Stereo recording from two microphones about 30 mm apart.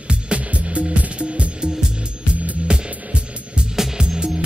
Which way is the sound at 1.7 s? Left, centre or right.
Right.